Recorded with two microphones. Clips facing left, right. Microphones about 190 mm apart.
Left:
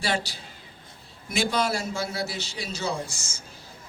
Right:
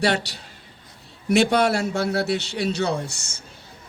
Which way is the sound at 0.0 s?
65° right (ahead or behind).